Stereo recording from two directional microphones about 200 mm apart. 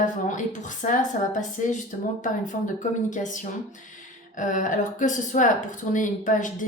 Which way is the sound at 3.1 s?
40° left (ahead or behind).